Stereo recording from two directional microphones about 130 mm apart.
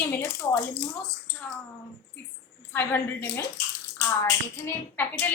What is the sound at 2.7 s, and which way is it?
Speech, 15° left (ahead or behind).